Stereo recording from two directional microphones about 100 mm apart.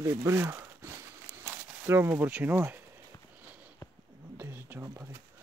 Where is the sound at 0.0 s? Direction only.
30° right (ahead or behind).